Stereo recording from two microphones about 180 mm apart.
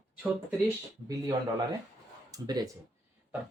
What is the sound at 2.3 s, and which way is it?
Speech, 20° right (ahead or behind).